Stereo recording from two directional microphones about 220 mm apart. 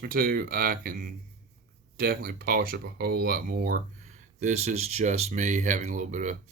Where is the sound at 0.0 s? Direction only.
40° right (ahead or behind).